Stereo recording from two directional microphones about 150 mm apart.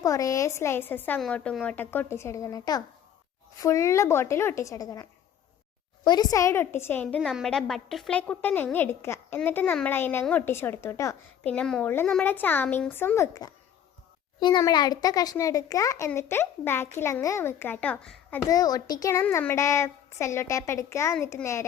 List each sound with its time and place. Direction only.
0.0 s a woman's voice: 25° left (ahead or behind)
6.1 s a woman's voice: 25° left (ahead or behind)
7.2 s a woman's voice: centre (ahead or behind); by 11.5 s 20° left (ahead or behind)
11.5 s a woman's voice: 5° left (ahead or behind)
14.6 s a woman's voice: 25° left (ahead or behind); by 18.3 s 5° left (ahead or behind)
18.4 s a woman's voice: 25° left (ahead or behind)
19.2 s a woman's voice: 10° left (ahead or behind)